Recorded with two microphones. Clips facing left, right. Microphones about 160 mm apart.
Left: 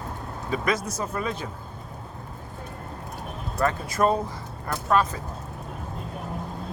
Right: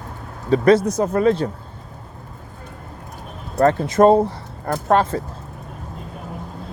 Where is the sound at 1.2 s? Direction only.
30° right (ahead or behind).